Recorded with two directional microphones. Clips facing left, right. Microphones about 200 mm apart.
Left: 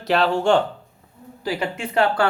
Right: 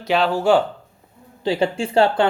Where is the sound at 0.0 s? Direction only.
Centre (ahead or behind).